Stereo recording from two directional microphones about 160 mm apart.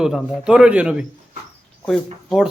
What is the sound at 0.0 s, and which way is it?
Speech, centre (ahead or behind).